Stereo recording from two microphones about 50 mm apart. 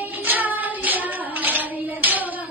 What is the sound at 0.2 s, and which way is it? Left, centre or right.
Child singing, right.